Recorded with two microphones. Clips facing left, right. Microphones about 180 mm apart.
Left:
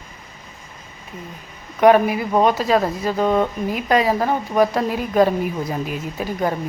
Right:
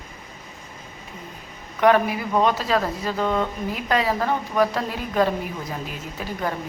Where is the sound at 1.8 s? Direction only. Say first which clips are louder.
Left 5 dB; 15° left (ahead or behind).